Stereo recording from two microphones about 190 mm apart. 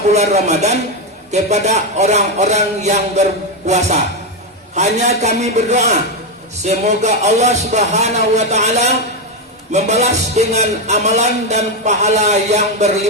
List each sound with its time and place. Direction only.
0.1 s speech: 35° right (ahead or behind)